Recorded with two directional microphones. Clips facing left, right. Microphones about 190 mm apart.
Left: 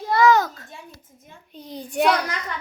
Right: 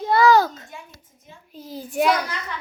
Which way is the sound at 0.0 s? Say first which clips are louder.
Right 1 dB; 30° right (ahead or behind).